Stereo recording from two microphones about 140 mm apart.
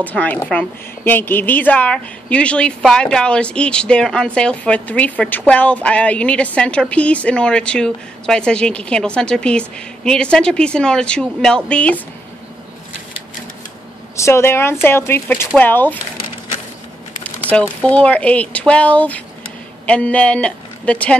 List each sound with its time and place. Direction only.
0.0 s speech: 10° left (ahead or behind)
14.1 s speech: 20° left (ahead or behind)
17.5 s speech: 10° left (ahead or behind)